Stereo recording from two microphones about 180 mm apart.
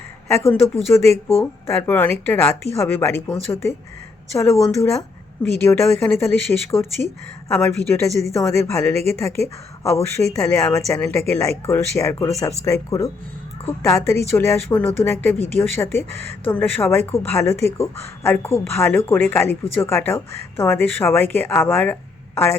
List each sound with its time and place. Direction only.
0.3 s a woman's voice: 15° left (ahead or behind)